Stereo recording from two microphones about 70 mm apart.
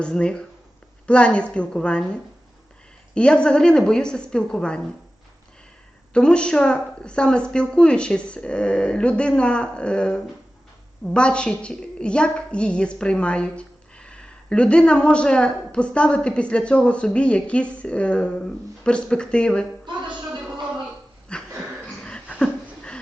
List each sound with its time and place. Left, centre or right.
0.0 s a woman's voice: centre
3.2 s a woman's voice: centre
6.1 s a woman's voice: centre
21.3 s a sound: centre